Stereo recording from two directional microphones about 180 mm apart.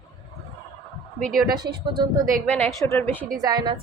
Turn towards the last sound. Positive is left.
turn(degrees=-25)  # may be behind; listen again after turning